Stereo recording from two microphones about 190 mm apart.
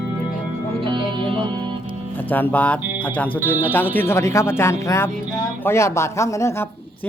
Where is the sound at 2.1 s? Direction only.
10° left (ahead or behind).